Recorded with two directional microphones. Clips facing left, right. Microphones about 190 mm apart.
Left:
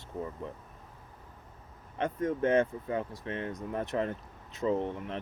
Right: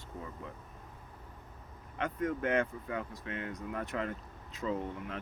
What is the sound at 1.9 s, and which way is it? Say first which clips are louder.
Speech: left 3 dB; 30° left (ahead or behind).